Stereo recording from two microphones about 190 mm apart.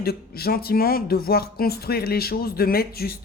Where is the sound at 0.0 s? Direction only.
55° left (ahead or behind).